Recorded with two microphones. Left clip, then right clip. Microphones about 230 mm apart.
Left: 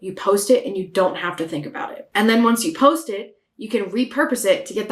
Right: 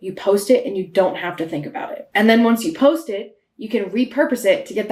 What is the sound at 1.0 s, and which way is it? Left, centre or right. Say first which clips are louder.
Speech: right 1 dB; left.